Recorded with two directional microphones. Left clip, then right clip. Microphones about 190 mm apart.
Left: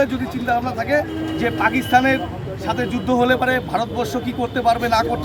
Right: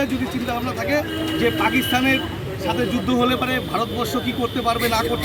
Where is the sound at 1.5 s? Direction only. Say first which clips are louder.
Left 2 dB; 10° left (ahead or behind).